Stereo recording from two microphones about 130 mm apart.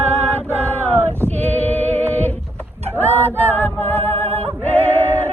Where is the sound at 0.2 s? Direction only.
10° left (ahead or behind).